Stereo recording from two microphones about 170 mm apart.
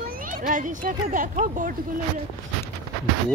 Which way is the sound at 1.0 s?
50° right (ahead or behind).